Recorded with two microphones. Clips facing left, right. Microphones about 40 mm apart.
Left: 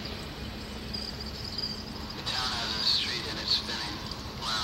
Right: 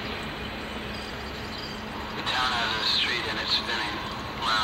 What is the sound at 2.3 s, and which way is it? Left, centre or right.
Vehicle, right.